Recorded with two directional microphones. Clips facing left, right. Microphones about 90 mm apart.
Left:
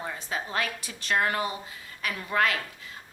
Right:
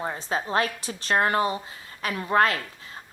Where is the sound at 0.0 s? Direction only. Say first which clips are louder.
Right 5 dB; 35° right (ahead or behind).